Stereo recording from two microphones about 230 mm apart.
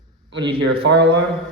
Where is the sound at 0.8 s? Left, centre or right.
Right.